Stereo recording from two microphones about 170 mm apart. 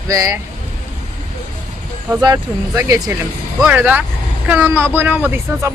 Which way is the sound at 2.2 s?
15° right (ahead or behind).